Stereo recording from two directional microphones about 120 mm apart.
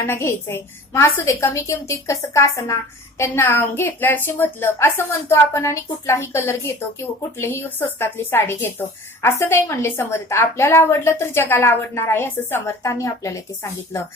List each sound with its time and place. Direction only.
0.0 s speech: 20° left (ahead or behind)